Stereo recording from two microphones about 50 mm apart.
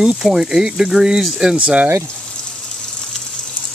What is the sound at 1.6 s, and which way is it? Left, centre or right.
Speech, right.